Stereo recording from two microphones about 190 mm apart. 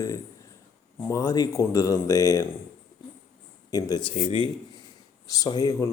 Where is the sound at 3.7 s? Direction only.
20° left (ahead or behind).